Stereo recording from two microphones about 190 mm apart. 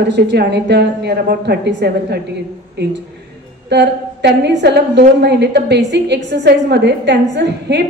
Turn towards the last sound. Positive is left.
turn(degrees=-65)  # may be behind; listen again after turning